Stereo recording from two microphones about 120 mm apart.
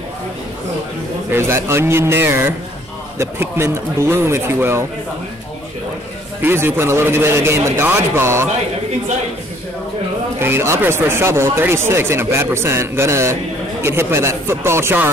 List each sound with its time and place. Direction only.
1.3 s speech: 20° right (ahead or behind)
6.4 s speech: 20° right (ahead or behind)
10.4 s speech: 20° right (ahead or behind)